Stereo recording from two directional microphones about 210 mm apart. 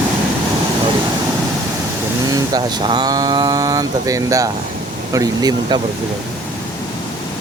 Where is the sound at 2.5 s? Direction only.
20° right (ahead or behind).